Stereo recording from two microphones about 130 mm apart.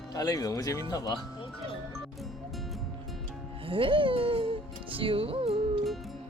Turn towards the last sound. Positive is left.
turn(degrees=-45)  # may be behind; listen again after turning